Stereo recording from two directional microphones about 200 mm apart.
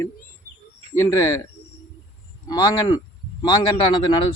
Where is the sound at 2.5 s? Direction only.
20° left (ahead or behind).